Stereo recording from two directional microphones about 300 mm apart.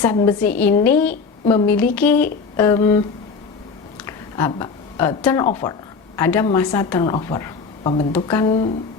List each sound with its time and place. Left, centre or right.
0.0 s a woman's voice: centre
3.9 s a sound: centre
6.1 s a woman's voice: centre